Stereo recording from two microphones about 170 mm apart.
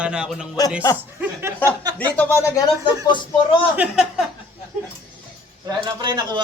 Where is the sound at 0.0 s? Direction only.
5° right (ahead or behind).